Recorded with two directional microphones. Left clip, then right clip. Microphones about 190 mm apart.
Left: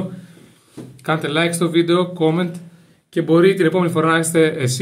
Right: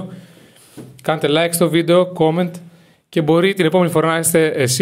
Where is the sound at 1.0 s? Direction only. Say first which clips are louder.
Right 3 dB; 40° right (ahead or behind).